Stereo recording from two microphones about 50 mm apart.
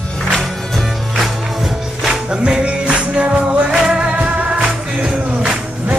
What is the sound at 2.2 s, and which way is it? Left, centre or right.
Music, centre.